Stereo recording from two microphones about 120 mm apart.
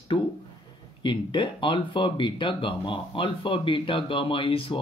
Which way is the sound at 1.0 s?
40° left (ahead or behind).